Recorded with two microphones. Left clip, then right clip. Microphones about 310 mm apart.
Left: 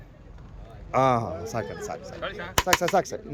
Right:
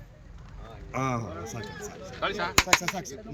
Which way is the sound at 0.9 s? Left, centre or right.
Centre.